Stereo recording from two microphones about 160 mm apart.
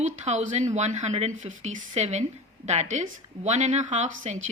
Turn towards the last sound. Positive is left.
turn(degrees=-50)  # may be behind; listen again after turning